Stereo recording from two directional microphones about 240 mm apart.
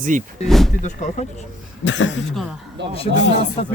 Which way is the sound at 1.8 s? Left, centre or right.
Left.